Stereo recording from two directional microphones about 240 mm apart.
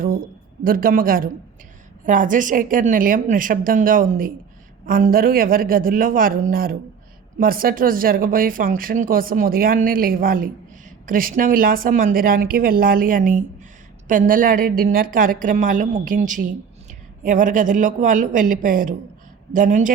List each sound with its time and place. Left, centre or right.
0.6 s speech: right